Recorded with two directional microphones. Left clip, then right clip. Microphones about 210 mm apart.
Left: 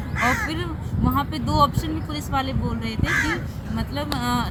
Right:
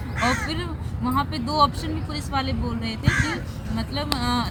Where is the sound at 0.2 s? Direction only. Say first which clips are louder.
Left 2 dB; 20° left (ahead or behind).